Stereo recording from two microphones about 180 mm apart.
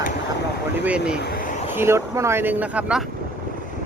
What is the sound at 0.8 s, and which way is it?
Speech, 5° right (ahead or behind).